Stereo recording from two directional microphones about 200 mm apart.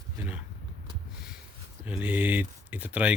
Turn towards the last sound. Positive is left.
turn(degrees=-5)  # may be behind; listen again after turning